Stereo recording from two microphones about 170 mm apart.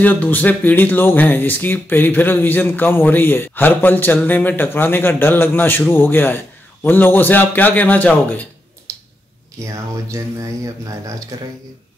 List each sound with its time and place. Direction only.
0.0 s speech: 10° left (ahead or behind)
9.7 s speech: 20° right (ahead or behind)